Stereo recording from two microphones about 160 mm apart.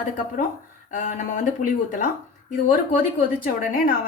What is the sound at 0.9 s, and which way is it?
A woman's voice, 50° left (ahead or behind).